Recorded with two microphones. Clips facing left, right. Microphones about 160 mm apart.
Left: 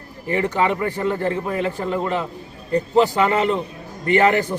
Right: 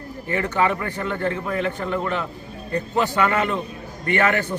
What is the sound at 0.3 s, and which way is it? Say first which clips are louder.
A man's voice: left 2 dB; 25° left (ahead or behind).